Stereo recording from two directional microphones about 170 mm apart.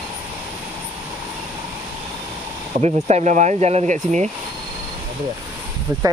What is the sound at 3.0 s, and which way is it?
Speech, 45° right (ahead or behind).